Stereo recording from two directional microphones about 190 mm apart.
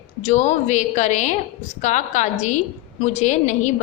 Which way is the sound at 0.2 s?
40° left (ahead or behind).